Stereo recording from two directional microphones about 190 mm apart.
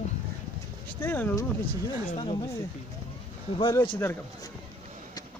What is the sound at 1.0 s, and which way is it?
Speech, 10° left (ahead or behind).